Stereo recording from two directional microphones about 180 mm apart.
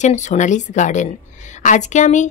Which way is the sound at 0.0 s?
40° left (ahead or behind).